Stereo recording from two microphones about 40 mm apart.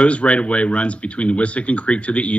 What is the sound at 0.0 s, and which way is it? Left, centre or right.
Speech, left.